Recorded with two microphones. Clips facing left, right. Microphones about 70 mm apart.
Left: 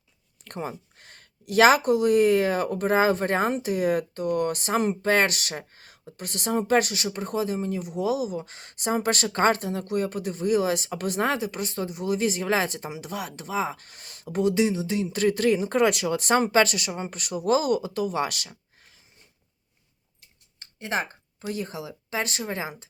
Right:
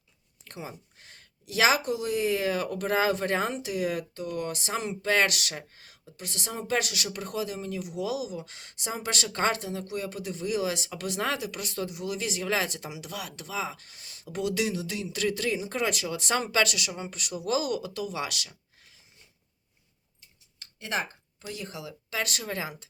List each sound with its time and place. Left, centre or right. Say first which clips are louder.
0.4 s speech: left 7 dB; left
20.6 s speech: left 3 dB; left